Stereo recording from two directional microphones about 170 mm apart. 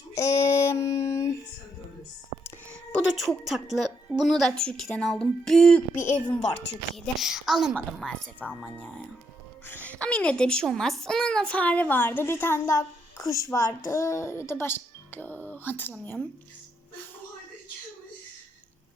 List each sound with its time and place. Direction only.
0.1 s child singing: 15° left (ahead or behind)
3.1 s a woman's voice: centre (ahead or behind)
9.8 s a woman's voice: 10° left (ahead or behind)